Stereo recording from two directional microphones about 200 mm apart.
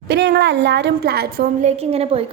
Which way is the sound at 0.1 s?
55° right (ahead or behind).